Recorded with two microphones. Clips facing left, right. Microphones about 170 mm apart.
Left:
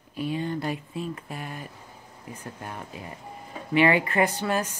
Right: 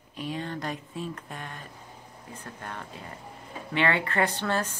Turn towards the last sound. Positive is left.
turn(degrees=10)  # may be behind; listen again after turning